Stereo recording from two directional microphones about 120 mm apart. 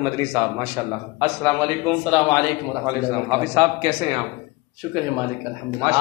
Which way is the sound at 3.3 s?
40° right (ahead or behind).